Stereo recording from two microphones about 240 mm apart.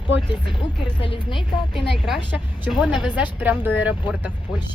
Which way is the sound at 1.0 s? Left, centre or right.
Left.